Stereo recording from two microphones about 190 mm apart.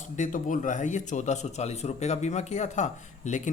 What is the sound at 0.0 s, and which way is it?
A man's voice, 40° left (ahead or behind).